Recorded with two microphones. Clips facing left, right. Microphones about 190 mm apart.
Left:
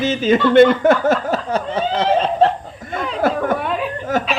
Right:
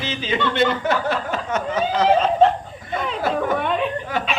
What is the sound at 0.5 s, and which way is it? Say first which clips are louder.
Snicker: left 10 dB; 50° left (ahead or behind).